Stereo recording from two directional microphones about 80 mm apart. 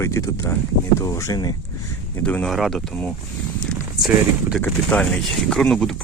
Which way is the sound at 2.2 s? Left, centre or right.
Centre.